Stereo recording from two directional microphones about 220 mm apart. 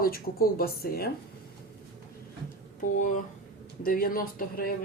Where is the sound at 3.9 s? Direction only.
40° left (ahead or behind).